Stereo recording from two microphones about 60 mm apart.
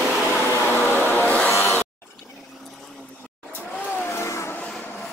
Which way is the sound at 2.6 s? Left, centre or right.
Centre.